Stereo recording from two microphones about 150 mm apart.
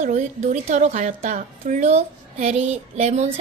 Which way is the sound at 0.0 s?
50° right (ahead or behind).